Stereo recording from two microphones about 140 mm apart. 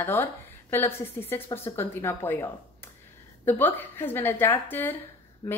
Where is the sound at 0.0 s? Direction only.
15° left (ahead or behind).